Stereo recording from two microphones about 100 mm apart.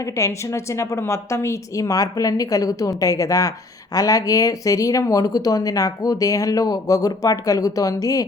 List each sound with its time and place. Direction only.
0.0 s speech: 30° left (ahead or behind)